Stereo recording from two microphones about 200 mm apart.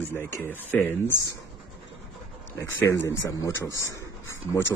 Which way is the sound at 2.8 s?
10° left (ahead or behind).